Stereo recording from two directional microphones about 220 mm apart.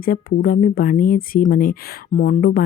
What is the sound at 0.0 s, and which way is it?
Speech, 40° left (ahead or behind).